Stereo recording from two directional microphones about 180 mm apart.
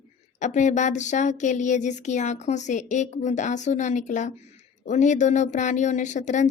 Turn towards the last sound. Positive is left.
turn(degrees=40)  # may be behind; listen again after turning